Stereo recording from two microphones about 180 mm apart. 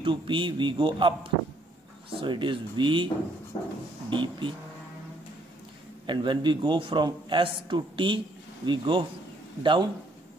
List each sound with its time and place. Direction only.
0.0 s a man's voice: 25° right (ahead or behind)
3.5 s a sound: 35° left (ahead or behind)
4.1 s a man's voice: 25° right (ahead or behind)
6.0 s a man's voice: 25° right (ahead or behind)